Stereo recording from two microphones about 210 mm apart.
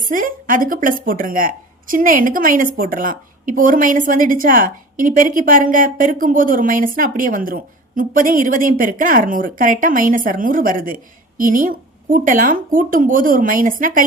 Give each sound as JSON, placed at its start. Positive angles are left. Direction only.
{"t": 0.0, "sound": "a woman's voice", "side_deg": -40}